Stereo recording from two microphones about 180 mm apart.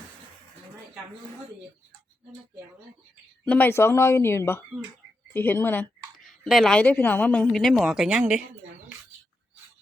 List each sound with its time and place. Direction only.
3.4 s a woman's voice: 10° left (ahead or behind)